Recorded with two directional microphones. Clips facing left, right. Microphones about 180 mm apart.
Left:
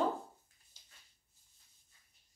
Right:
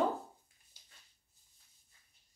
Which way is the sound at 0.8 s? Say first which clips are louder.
Right 1 dB; 10° right (ahead or behind).